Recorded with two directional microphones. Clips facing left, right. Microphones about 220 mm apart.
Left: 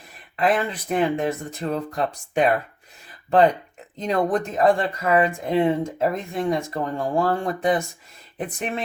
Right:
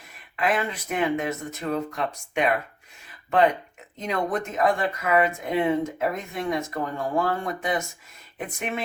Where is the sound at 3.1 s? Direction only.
35° left (ahead or behind).